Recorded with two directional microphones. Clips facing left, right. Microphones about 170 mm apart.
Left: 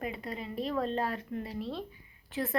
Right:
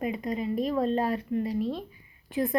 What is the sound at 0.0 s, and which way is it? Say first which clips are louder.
A woman's voice: right 8 dB; 15° right (ahead or behind).